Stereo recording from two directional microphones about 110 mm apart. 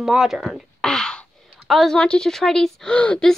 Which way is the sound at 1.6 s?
Centre (ahead or behind).